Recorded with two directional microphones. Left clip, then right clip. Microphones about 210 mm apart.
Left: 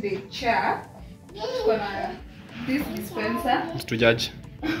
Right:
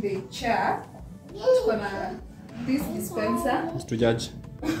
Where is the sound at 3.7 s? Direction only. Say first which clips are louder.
Left 4 dB; 5° right (ahead or behind).